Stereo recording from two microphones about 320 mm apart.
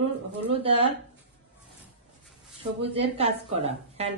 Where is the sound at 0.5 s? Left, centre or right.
Centre.